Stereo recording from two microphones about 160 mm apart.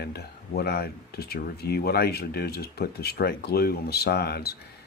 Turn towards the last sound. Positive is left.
turn(degrees=85)